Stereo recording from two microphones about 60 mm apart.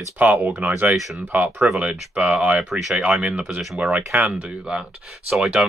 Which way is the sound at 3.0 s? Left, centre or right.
Right.